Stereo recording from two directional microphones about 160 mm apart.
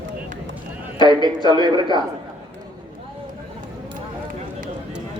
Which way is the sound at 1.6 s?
30° right (ahead or behind).